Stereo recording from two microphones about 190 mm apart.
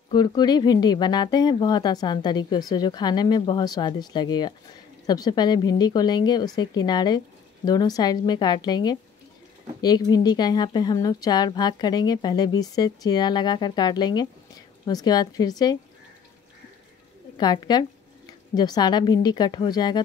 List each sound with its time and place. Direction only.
0.1 s speech: 20° left (ahead or behind)
17.4 s speech: 20° left (ahead or behind)